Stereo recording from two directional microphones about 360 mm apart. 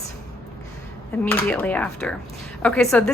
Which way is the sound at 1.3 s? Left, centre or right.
Centre.